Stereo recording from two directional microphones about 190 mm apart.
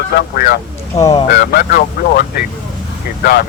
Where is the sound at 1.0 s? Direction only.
15° left (ahead or behind).